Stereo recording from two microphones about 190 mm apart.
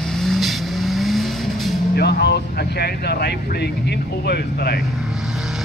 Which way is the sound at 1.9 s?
60° left (ahead or behind).